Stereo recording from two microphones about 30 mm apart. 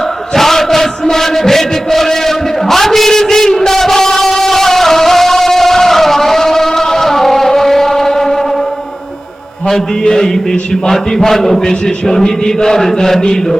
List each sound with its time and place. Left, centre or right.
0.3 s chant: centre
1.0 s a sound: centre
10.0 s a man's voice: left